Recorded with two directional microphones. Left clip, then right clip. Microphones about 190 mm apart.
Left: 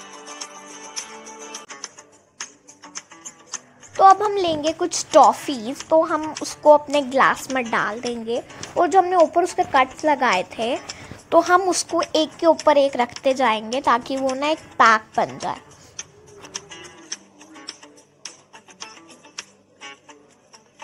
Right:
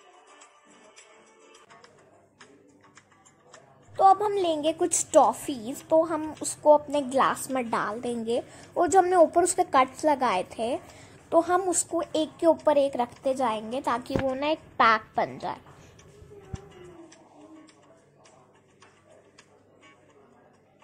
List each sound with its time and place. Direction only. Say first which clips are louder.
0.0 s music: left 16 dB; 55° left (ahead or behind)
3.9 s a sound: left 6 dB; 10° left (ahead or behind)
4.3 s a woman's voice: left 4 dB; 5° left (ahead or behind)
5.2 s a woman's voice: left 8 dB; 5° left (ahead or behind)
16.5 s music: left 13 dB; 50° left (ahead or behind)
19.3 s music: left 16 dB; 50° left (ahead or behind)